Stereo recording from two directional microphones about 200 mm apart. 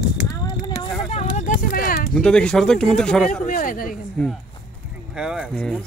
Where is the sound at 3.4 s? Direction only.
45° left (ahead or behind).